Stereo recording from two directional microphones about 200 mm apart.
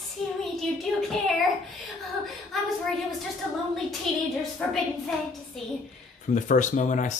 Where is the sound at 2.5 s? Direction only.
Centre (ahead or behind).